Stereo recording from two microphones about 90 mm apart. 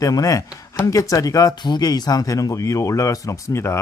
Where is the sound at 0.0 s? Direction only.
40° left (ahead or behind).